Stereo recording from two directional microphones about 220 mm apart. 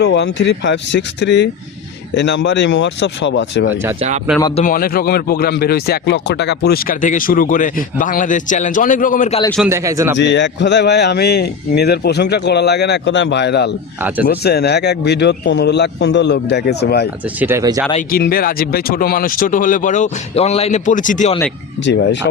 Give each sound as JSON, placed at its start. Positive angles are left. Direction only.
{"t": 0.0, "sound": "a man's voice", "side_deg": 50}
{"t": 3.7, "sound": "speech", "side_deg": -10}
{"t": 4.5, "sound": "speech", "side_deg": 40}
{"t": 9.6, "sound": "speech", "side_deg": -15}
{"t": 10.2, "sound": "a man's voice", "side_deg": 55}
{"t": 17.2, "sound": "speech", "side_deg": -10}
{"t": 18.1, "sound": "speech", "side_deg": 40}
{"t": 21.8, "sound": "a man's voice", "side_deg": 55}